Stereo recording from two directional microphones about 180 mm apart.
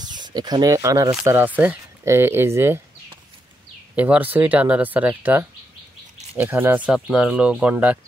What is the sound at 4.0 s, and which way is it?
Speech, 10° right (ahead or behind).